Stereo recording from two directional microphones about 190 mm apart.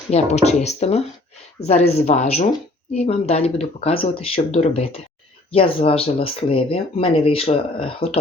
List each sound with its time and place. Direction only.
0.1 s speech: 35° left (ahead or behind)